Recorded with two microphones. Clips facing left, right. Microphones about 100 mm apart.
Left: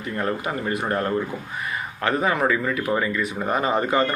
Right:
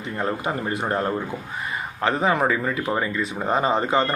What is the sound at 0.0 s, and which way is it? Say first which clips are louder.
Speech: even; 25° right (ahead or behind).